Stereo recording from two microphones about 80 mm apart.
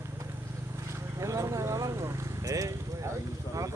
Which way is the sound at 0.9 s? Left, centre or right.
Right.